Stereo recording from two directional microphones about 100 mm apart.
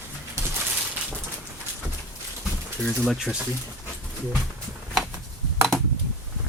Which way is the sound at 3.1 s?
Centre (ahead or behind).